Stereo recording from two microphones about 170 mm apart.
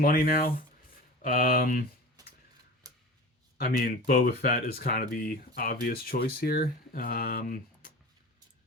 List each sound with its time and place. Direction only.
0.0 s speech: 55° left (ahead or behind)
2.2 s a sound: 20° right (ahead or behind)
2.8 s shuffling cards: 20° right (ahead or behind)
3.6 s speech: 60° left (ahead or behind)